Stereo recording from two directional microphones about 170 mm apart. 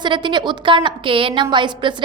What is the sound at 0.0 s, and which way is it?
A woman's voice, 25° right (ahead or behind).